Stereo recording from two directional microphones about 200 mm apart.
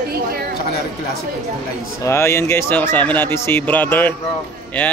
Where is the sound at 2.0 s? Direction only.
15° left (ahead or behind).